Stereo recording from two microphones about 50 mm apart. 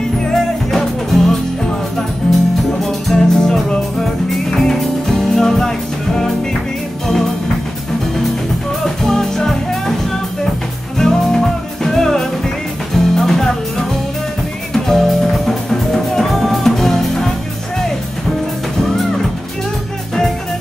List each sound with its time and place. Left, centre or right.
0.3 s music: centre
8.8 s music: centre
11.0 s music: centre